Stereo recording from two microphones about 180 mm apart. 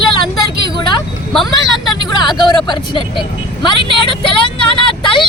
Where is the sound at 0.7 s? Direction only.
25° left (ahead or behind).